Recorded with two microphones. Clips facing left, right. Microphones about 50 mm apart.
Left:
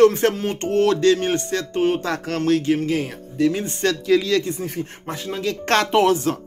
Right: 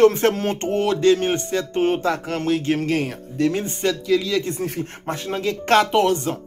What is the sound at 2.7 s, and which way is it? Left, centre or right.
Speech, right.